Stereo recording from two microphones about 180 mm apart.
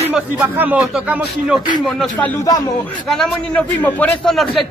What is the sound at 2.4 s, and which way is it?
Speech, 20° left (ahead or behind).